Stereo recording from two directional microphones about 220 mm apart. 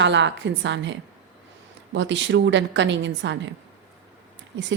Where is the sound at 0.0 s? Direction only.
55° right (ahead or behind).